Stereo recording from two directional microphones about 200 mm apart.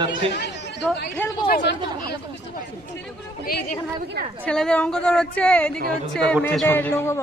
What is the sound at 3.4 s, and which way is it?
Speech, 45° left (ahead or behind).